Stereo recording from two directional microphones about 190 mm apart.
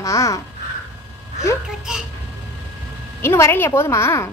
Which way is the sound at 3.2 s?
15° left (ahead or behind).